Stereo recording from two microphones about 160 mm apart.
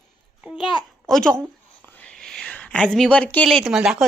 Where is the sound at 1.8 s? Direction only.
10° left (ahead or behind).